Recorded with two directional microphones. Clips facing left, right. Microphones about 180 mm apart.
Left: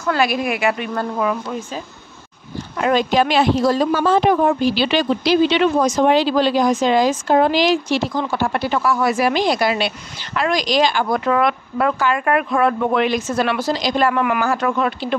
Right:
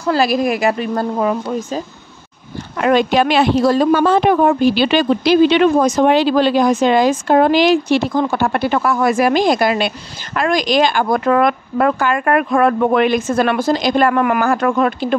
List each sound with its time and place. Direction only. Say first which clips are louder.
0.0 s a woman's voice: right 4 dB; 35° right (ahead or behind)
2.8 s a woman's voice: right 3 dB; 65° right (ahead or behind); by 15.1 s 50° right (ahead or behind)